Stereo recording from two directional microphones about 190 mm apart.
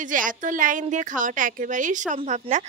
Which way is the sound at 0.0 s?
45° right (ahead or behind).